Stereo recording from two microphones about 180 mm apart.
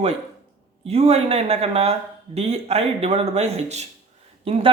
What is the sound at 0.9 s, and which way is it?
Speech, 35° right (ahead or behind).